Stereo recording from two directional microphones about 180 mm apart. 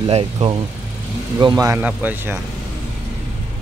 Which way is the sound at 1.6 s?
10° right (ahead or behind).